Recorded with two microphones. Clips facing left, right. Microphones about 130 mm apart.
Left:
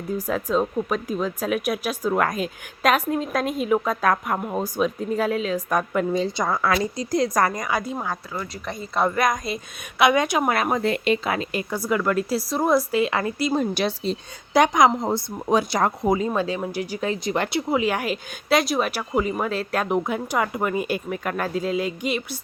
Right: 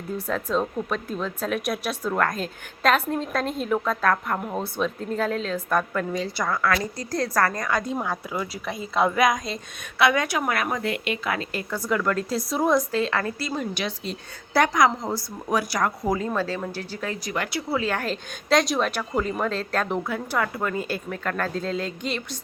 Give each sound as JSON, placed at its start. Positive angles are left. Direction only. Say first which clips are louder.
{"t": 0.3, "sound": "a woman's voice", "louder": "left 2 dB", "side_deg": 5}
{"t": 10.0, "sound": "a woman's voice", "louder": "left 3 dB", "side_deg": 20}
{"t": 13.5, "sound": "a woman's voice", "louder": "left 6 dB", "side_deg": 35}
{"t": 14.5, "sound": "a woman's voice", "louder": "left 3 dB", "side_deg": 20}
{"t": 17.7, "sound": "a woman's voice", "louder": "left 1 dB", "side_deg": 15}